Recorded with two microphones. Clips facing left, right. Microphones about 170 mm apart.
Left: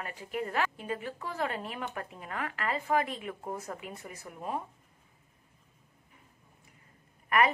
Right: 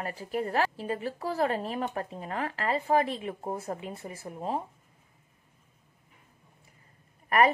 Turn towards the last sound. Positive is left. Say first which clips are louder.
# right 3 dB
turn(degrees=-35)  # may be behind; listen again after turning